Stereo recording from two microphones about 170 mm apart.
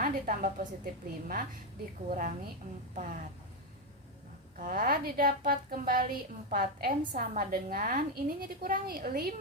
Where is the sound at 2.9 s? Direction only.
45° right (ahead or behind).